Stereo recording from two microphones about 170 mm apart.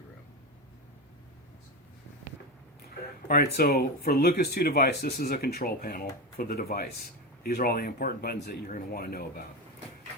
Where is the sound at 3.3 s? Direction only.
60° left (ahead or behind).